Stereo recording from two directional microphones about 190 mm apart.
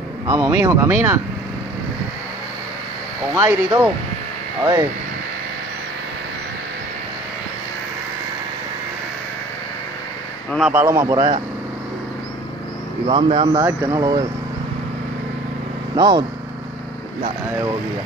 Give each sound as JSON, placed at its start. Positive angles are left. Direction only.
{"t": 0.3, "sound": "speech", "side_deg": -15}
{"t": 3.3, "sound": "speech", "side_deg": -15}
{"t": 10.7, "sound": "speech", "side_deg": -15}
{"t": 13.0, "sound": "speech", "side_deg": -30}
{"t": 16.0, "sound": "speech", "side_deg": -20}
{"t": 17.5, "sound": "speech", "side_deg": -15}